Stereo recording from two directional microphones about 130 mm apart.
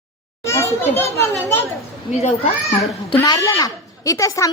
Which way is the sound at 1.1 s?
20° left (ahead or behind).